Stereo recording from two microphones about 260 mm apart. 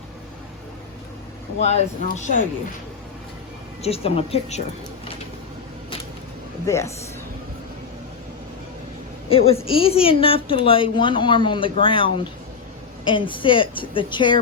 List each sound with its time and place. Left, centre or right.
1.6 s speech: left
3.8 s speech: left
6.7 s speech: centre
9.3 s speech: left